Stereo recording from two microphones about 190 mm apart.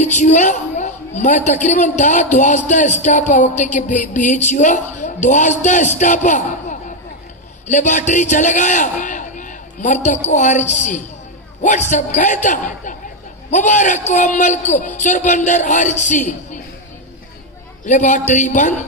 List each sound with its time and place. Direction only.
0.0 s a woman's voice: 40° left (ahead or behind)
17.8 s a woman's voice: 40° left (ahead or behind)